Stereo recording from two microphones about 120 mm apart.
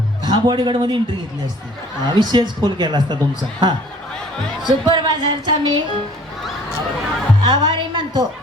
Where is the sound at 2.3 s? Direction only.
35° right (ahead or behind).